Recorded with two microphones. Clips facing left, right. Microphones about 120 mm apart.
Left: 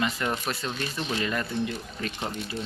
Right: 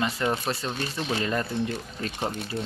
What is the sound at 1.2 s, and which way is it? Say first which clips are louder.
Speech: right 2 dB; 35° right (ahead or behind).